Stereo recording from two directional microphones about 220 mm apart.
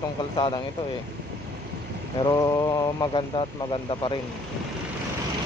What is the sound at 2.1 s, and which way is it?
Speech, 20° left (ahead or behind).